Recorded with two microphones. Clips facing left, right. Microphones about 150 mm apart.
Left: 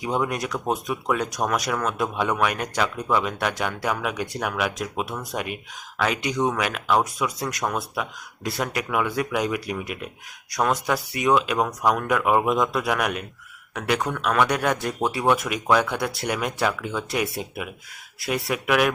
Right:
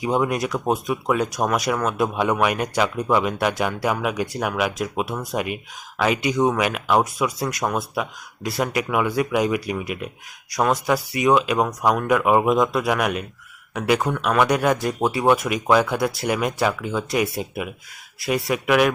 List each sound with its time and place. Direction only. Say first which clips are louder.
0.0 s speech: right 4 dB; 5° right (ahead or behind)